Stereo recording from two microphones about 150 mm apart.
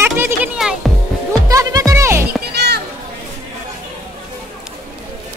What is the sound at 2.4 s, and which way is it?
Children playing, 90° right.